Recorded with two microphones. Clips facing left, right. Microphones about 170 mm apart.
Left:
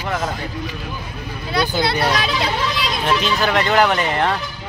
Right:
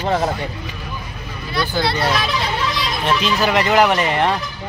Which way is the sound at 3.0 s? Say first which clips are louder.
Right 1 dB; centre (ahead or behind).